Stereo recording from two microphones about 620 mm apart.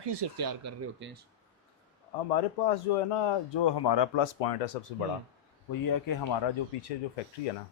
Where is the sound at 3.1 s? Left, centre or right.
Left.